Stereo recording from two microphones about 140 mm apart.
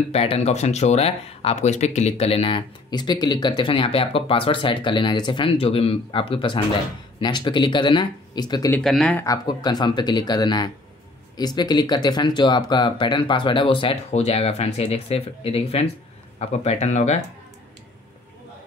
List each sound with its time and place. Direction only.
0.1 s speech: 45° left (ahead or behind); by 8.7 s 30° left (ahead or behind)
8.8 s speech: 5° left (ahead or behind)
9.2 s speech: 25° left (ahead or behind); by 17.2 s 55° left (ahead or behind)